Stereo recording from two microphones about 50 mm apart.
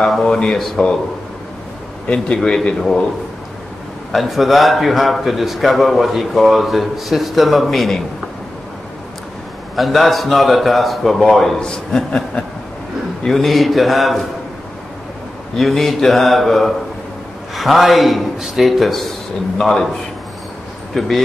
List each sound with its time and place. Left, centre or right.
0.2 s speech: centre
2.0 s speech: centre
4.1 s a man's voice: centre
9.8 s a man's voice: centre
11.6 s speech: centre
13.2 s a man's voice: centre
15.5 s a man's voice: centre
20.9 s speech: centre